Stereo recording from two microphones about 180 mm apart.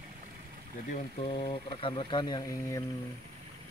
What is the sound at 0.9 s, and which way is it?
Speech, 45° left (ahead or behind).